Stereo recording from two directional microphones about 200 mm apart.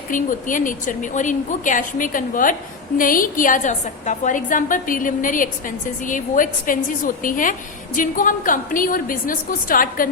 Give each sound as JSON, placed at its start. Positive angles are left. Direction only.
{"t": 0.1, "sound": "a woman's voice", "side_deg": 40}